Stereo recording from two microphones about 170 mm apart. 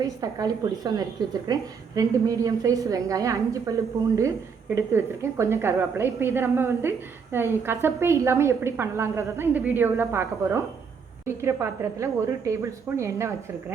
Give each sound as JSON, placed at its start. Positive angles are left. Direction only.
{"t": 0.0, "sound": "a woman's voice", "side_deg": -20}